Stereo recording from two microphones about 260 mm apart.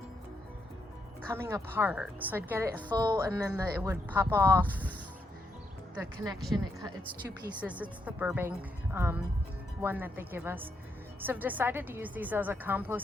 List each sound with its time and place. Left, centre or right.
1.3 s speech: centre
4.7 s speech: centre
5.9 s a woman's voice: centre
7.6 s a woman's voice: centre